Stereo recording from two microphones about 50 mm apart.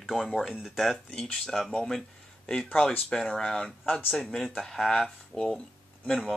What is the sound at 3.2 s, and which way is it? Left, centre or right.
Speech, centre.